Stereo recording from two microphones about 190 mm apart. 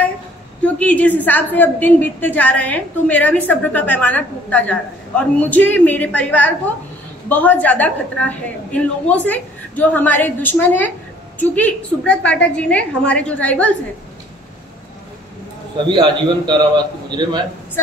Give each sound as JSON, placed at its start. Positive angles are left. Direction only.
{"t": 0.7, "sound": "a woman's voice", "side_deg": 5}
{"t": 15.9, "sound": "a man's voice", "side_deg": -25}